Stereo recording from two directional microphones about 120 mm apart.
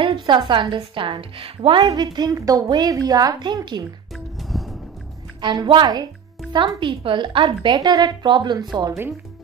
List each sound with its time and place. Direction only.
0.0 s a woman's voice: 45° right (ahead or behind)
1.9 s a woman's voice: 35° right (ahead or behind)
4.4 s music: centre (ahead or behind)
5.4 s a woman's voice: 40° right (ahead or behind)